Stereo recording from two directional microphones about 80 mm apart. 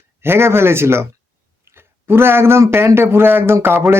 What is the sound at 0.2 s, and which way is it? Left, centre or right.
Speech, right.